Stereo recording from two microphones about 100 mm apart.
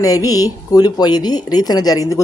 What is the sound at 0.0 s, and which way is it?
Speech, 35° left (ahead or behind).